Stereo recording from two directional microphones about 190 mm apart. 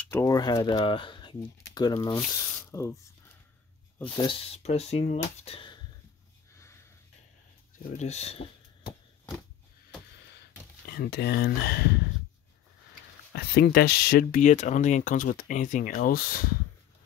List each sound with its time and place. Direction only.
0.0 s speech: 15° left (ahead or behind)
4.1 s speech: 25° left (ahead or behind)
8.0 s speech: 35° left (ahead or behind)
10.9 s speech: 55° left (ahead or behind)
13.3 s speech: 55° left (ahead or behind)